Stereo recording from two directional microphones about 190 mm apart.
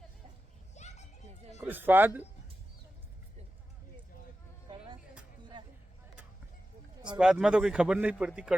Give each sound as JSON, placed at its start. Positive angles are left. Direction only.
{"t": 0.7, "sound": "children playing", "side_deg": 35}
{"t": 1.5, "sound": "speech", "side_deg": -10}
{"t": 5.5, "sound": "a sound", "side_deg": -25}
{"t": 7.2, "sound": "a man's voice", "side_deg": -5}